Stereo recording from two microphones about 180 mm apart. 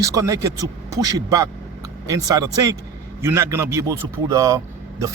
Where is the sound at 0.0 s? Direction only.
20° right (ahead or behind).